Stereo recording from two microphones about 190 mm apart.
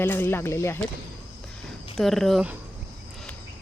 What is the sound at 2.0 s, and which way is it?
Speech, centre (ahead or behind).